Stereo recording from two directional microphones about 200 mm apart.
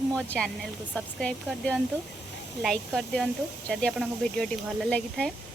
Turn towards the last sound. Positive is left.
turn(degrees=5)  # may be behind; listen again after turning